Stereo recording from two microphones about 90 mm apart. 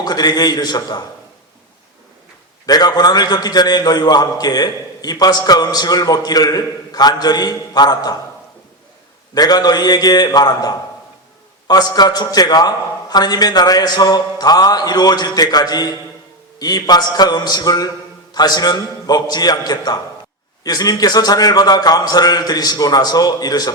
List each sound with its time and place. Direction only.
0.0 s a man's voice: 50° left (ahead or behind)
2.6 s a man's voice: 50° left (ahead or behind)
9.3 s a man's voice: 45° left (ahead or behind)